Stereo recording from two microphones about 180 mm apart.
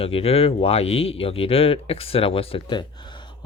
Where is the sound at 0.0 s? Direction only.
30° left (ahead or behind).